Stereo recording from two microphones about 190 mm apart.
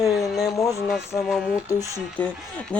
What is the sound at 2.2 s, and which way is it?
Speech, 10° left (ahead or behind).